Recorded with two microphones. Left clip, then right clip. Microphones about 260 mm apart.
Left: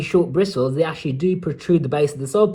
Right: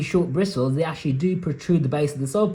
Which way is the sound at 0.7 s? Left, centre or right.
Centre.